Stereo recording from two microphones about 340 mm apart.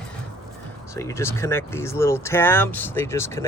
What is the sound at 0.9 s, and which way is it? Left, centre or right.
Speech, centre.